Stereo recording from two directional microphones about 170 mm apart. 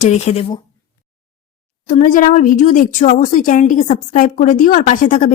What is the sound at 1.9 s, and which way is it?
A woman's voice, 50° left (ahead or behind).